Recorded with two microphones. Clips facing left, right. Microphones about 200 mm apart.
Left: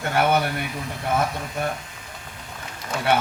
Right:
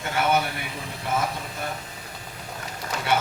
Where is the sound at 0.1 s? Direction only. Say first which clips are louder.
Left 2 dB; 55° left (ahead or behind).